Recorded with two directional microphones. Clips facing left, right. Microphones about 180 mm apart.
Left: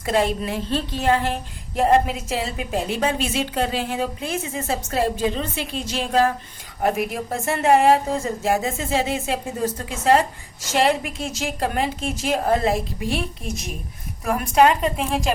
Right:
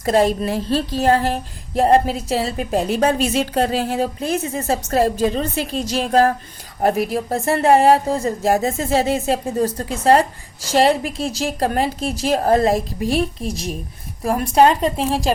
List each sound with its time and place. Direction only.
0.0 s a woman's voice: 40° right (ahead or behind)